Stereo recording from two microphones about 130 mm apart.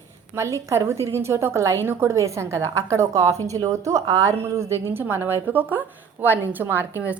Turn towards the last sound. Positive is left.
turn(degrees=-15)  # may be behind; listen again after turning